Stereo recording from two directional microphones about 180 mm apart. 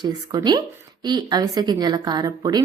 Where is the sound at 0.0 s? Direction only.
20° right (ahead or behind).